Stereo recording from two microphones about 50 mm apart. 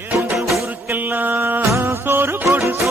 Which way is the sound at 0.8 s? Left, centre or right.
Right.